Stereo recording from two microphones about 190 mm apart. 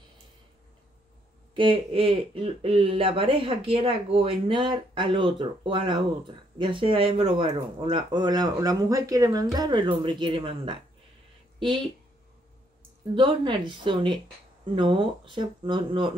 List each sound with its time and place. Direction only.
1.5 s speech: 30° right (ahead or behind)
13.1 s speech: 25° right (ahead or behind)